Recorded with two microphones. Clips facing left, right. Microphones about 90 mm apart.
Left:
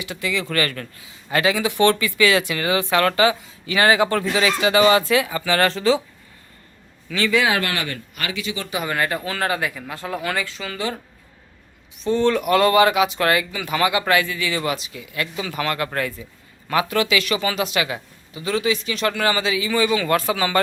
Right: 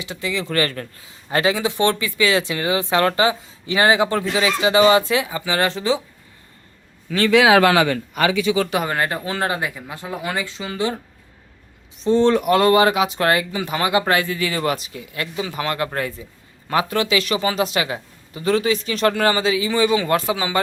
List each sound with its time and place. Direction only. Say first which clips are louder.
0.0 s speech: even; 25° right (ahead or behind)
7.3 s speech: right 5 dB; 75° right (ahead or behind)
8.8 s speech: right 1 dB; 30° right (ahead or behind)
12.0 s speech: right 3 dB; 30° right (ahead or behind)
18.4 s speech: right 3 dB; 40° right (ahead or behind); by 20.6 s 15° right (ahead or behind)